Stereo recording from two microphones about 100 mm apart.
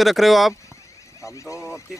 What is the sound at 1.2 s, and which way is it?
Speech, 30° left (ahead or behind).